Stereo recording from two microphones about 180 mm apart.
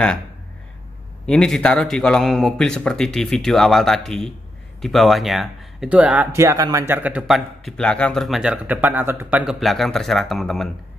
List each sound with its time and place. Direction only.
1.2 s speech: 5° left (ahead or behind)